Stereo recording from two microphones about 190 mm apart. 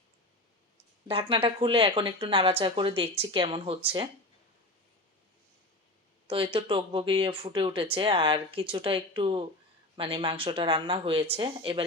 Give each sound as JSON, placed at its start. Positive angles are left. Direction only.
{"t": 1.0, "sound": "speech", "side_deg": -30}
{"t": 6.2, "sound": "speech", "side_deg": -25}